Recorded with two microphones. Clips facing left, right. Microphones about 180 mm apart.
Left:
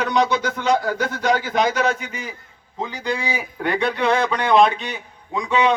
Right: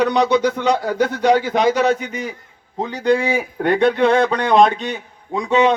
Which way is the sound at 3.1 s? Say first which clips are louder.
Right 11 dB; 50° right (ahead or behind).